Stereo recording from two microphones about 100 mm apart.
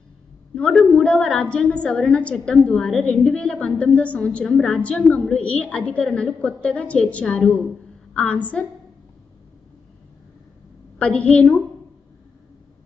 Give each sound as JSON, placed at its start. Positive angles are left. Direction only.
{"t": 0.6, "sound": "a woman's voice", "side_deg": 10}
{"t": 11.0, "sound": "a woman's voice", "side_deg": 10}